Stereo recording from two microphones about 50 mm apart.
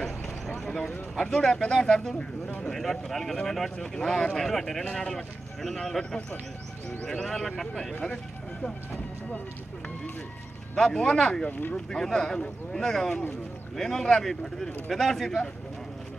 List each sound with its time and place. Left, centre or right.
0.7 s a sound: centre
1.2 s speech: centre
7.2 s speech: centre
10.8 s speech: centre